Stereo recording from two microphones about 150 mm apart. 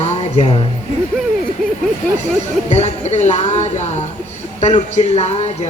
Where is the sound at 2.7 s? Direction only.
50° left (ahead or behind).